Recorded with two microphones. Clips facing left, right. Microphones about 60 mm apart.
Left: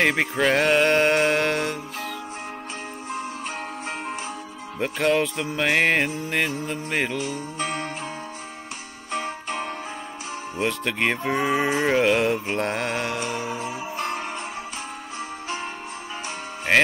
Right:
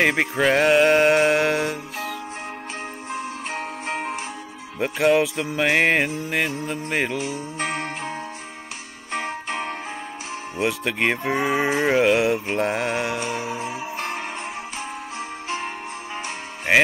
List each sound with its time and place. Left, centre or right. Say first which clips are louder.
0.0 s speech: right 1 dB; centre
3.5 s music: right 3 dB; right
4.7 s speech: right 3 dB; centre
7.5 s music: right 2 dB; right
9.1 s music: right 1 dB; right
10.6 s speech: right 2 dB; centre
13.6 s music: even; right
16.7 s music: right 1 dB; centre